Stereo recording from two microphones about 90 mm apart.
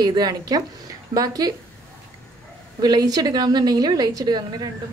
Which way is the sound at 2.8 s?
50° right (ahead or behind).